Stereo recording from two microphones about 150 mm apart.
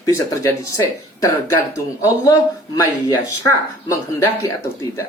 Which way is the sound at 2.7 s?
25° left (ahead or behind).